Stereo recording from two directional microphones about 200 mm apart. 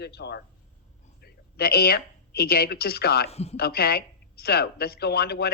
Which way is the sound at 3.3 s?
30° left (ahead or behind).